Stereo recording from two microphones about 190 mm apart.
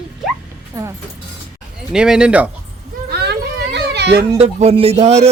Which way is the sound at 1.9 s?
5° right (ahead or behind).